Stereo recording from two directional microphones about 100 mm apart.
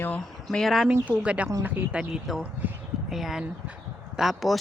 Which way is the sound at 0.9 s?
15° right (ahead or behind).